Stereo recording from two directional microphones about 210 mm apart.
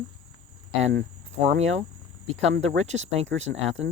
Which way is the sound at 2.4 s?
60° right (ahead or behind).